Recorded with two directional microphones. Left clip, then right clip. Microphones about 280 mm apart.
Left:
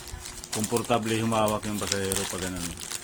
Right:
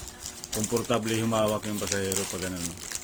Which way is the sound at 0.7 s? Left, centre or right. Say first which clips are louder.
Left 2 dB; centre.